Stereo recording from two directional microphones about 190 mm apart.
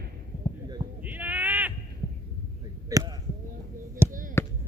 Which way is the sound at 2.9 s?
15° right (ahead or behind).